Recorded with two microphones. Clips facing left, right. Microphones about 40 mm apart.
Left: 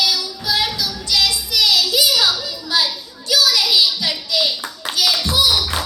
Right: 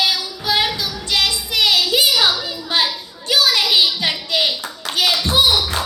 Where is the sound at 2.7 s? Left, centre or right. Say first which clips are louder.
Right 1 dB; right.